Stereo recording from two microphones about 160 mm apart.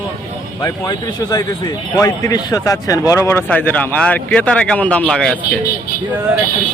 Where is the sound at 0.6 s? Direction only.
25° left (ahead or behind); by 5.5 s 5° left (ahead or behind).